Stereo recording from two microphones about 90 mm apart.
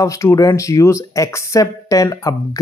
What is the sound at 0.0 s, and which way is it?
Speech, 35° left (ahead or behind).